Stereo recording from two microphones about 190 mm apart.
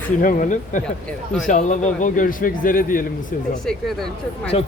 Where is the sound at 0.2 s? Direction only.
45° left (ahead or behind).